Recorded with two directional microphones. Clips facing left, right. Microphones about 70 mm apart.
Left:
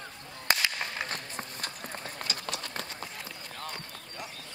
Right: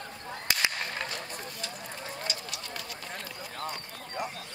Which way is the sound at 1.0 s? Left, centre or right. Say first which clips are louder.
Even; left.